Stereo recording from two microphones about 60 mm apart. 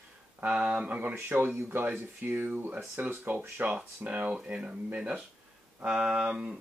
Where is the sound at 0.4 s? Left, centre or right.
Right.